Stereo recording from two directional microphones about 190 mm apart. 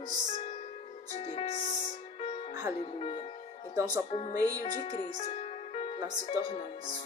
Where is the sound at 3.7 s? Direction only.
15° right (ahead or behind).